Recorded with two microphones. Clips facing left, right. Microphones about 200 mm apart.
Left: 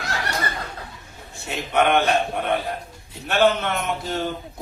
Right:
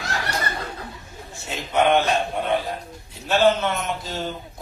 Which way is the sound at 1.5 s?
60° left (ahead or behind).